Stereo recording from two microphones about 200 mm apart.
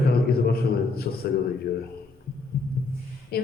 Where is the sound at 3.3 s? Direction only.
50° left (ahead or behind).